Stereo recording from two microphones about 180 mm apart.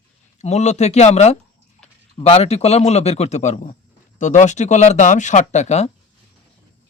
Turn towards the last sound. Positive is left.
turn(degrees=40)  # may be behind; listen again after turning